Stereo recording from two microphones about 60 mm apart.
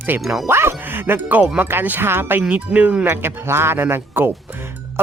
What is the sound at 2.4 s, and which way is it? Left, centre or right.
Speech, right.